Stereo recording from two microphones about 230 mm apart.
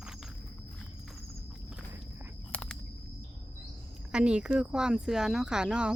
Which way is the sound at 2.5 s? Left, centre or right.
Centre.